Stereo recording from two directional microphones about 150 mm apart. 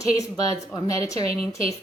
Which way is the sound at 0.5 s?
20° left (ahead or behind).